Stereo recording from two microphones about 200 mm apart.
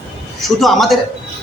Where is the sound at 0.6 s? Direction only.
Centre (ahead or behind).